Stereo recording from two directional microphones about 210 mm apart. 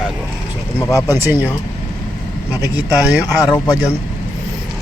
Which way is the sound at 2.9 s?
5° right (ahead or behind).